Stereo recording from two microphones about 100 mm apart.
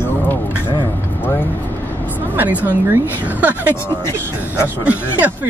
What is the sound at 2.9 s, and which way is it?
Speech, 15° right (ahead or behind).